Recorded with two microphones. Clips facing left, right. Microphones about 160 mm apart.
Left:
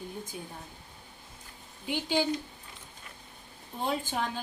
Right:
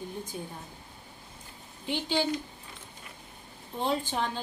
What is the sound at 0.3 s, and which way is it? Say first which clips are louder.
Speech: right 3 dB; 40° right (ahead or behind).